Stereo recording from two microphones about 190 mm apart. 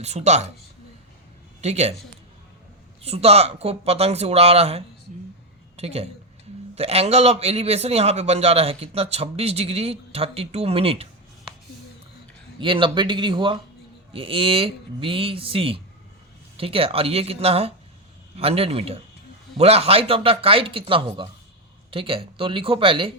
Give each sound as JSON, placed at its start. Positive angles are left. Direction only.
{"t": 0.0, "sound": "a man's voice", "side_deg": -35}
{"t": 1.6, "sound": "a man's voice", "side_deg": -35}
{"t": 3.0, "sound": "a man's voice", "side_deg": -30}
{"t": 12.5, "sound": "a man's voice", "side_deg": -25}